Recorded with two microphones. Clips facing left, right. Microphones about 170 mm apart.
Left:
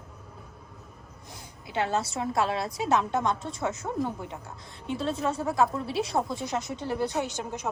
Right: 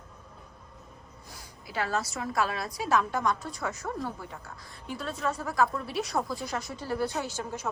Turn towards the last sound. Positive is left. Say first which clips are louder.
# left 2 dB
turn(degrees=20)  # may be behind; listen again after turning